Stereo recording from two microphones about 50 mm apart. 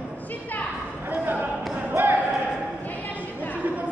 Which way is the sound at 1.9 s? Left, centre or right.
Right.